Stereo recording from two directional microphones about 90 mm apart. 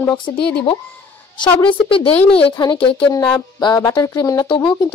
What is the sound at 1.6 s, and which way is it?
Speech, 70° left (ahead or behind).